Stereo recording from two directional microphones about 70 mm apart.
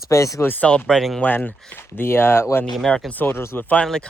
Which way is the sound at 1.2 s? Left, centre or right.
Left.